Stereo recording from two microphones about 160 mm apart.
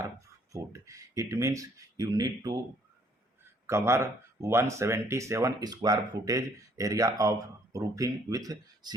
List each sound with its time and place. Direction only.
0.5 s speech: 20° right (ahead or behind)
3.7 s speech: 15° right (ahead or behind)